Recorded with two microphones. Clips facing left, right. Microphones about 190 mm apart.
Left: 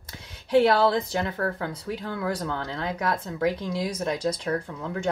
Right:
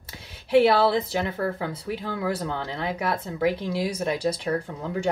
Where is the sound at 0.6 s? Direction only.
10° right (ahead or behind).